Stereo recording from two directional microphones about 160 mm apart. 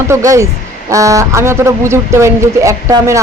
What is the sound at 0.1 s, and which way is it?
A woman's voice, 20° right (ahead or behind).